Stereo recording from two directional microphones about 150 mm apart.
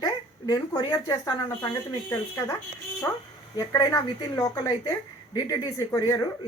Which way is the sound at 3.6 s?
25° left (ahead or behind).